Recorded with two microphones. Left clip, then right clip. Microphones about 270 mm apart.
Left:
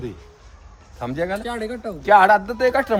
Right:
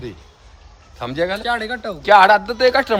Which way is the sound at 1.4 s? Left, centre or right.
Centre.